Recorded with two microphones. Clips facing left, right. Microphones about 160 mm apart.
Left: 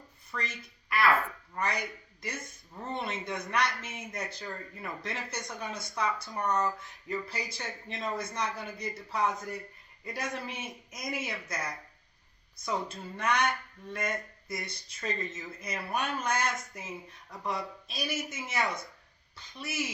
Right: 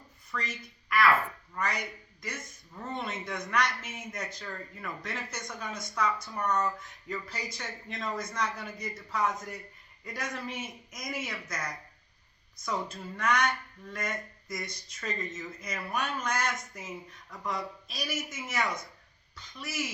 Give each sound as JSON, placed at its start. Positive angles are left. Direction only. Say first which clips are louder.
{"t": 0.3, "sound": "speech", "louder": "right 1 dB", "side_deg": 30}
{"t": 2.8, "sound": "a man's voice", "louder": "left 1 dB", "side_deg": 30}